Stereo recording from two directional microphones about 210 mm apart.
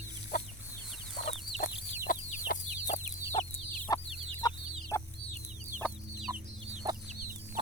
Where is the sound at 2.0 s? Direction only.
40° left (ahead or behind).